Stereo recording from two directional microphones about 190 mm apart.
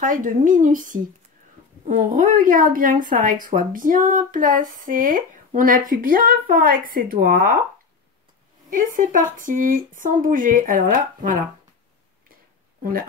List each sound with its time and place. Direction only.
0.0 s a woman's voice: 45° right (ahead or behind)
8.6 s a woman's voice: 45° right (ahead or behind)